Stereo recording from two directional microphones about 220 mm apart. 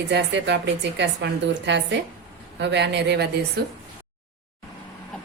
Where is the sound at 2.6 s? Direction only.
50° right (ahead or behind).